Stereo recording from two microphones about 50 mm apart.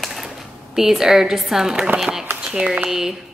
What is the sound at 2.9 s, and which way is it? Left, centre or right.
Speech, centre.